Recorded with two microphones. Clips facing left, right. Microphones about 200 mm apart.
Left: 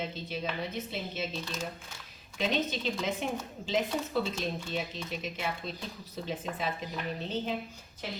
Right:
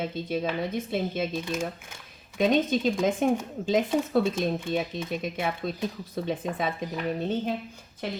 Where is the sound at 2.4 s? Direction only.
50° right (ahead or behind).